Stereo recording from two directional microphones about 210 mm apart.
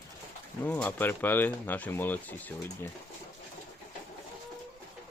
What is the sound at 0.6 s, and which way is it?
Speech, 10° left (ahead or behind).